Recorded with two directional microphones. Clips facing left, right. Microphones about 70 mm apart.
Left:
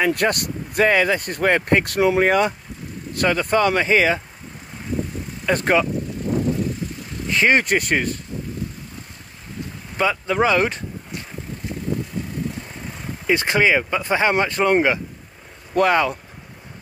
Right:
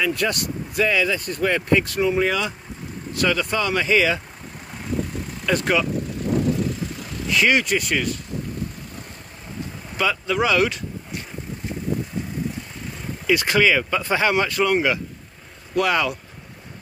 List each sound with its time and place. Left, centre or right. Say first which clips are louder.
0.0 s speech: left 3 dB; left
2.2 s speech: left 5 dB; left
5.6 s speech: left 4 dB; left
7.2 s speech: left 2 dB; left
7.6 s speech: left 2 dB; left
9.9 s speech: left 2 dB; left
13.3 s speech: left 1 dB; left